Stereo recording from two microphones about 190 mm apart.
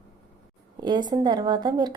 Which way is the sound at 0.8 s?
20° right (ahead or behind).